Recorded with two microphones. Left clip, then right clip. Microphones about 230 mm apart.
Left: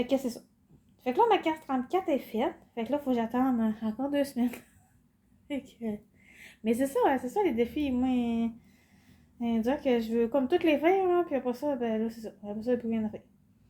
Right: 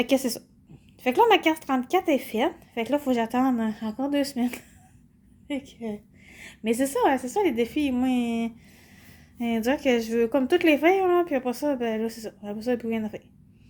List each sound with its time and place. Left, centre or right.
0.0 s a woman's voice: right